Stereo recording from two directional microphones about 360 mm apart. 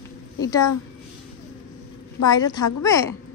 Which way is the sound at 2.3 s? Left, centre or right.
Centre.